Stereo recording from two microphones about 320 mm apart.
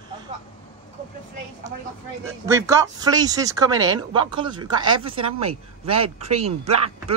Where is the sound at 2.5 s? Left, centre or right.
Centre.